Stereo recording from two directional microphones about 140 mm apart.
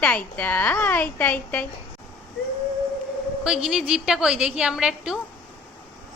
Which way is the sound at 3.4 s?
5° right (ahead or behind).